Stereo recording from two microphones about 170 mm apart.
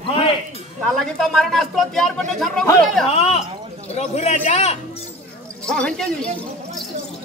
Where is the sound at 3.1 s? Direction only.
35° left (ahead or behind).